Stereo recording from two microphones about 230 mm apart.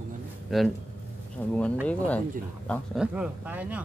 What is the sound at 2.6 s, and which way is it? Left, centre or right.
Speech, centre.